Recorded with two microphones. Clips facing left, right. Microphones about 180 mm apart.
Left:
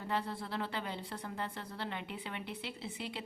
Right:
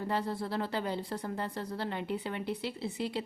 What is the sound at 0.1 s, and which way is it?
Speech, 40° right (ahead or behind).